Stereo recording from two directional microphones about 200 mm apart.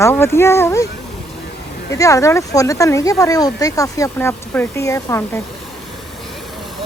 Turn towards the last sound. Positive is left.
turn(degrees=15)  # may be behind; listen again after turning